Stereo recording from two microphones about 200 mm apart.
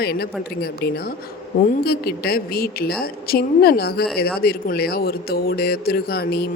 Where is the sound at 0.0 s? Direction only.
50° left (ahead or behind).